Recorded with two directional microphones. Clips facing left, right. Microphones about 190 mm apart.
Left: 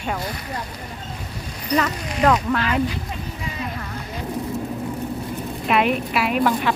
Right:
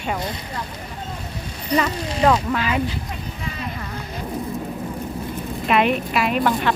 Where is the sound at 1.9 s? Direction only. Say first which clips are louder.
Right 2 dB; 30° right (ahead or behind).